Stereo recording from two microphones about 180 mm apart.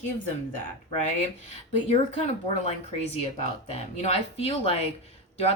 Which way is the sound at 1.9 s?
40° left (ahead or behind).